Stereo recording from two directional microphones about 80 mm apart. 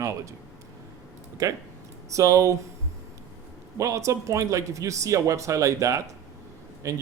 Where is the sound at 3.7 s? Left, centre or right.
Right.